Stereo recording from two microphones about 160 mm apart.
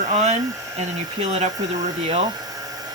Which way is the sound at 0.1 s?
40° right (ahead or behind).